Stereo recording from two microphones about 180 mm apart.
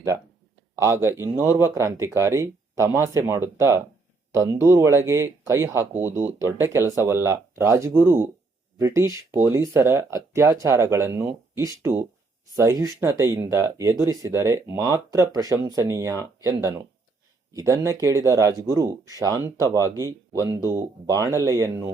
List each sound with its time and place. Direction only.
1.4 s speech: 15° right (ahead or behind)